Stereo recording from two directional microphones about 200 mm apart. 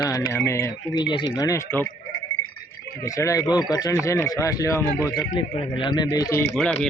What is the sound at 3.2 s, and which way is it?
A man's voice, 15° left (ahead or behind).